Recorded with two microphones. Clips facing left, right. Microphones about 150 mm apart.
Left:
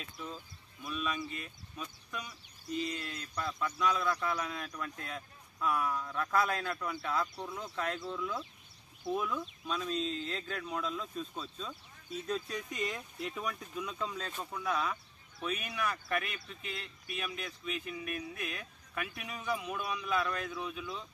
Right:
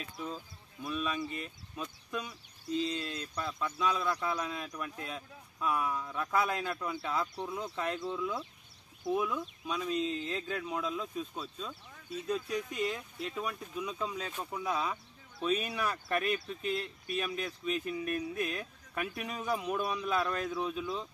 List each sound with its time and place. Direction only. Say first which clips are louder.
0.8 s speech: right 2 dB; 25° right (ahead or behind)
14.6 s speech: even; 20° right (ahead or behind)
15.3 s speech: right 5 dB; 35° right (ahead or behind)